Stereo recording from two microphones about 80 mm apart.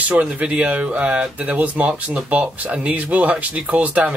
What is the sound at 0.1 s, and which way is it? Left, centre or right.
Speech, centre.